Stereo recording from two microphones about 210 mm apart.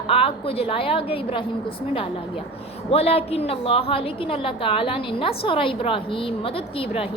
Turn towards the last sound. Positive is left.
turn(degrees=25)  # may be behind; listen again after turning